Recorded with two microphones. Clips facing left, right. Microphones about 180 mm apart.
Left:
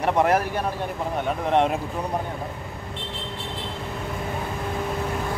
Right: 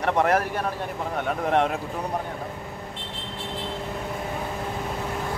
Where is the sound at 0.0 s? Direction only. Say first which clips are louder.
Left 1 dB; 10° left (ahead or behind).